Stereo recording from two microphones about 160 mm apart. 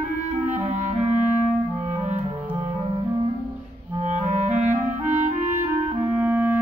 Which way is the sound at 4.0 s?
50° right (ahead or behind).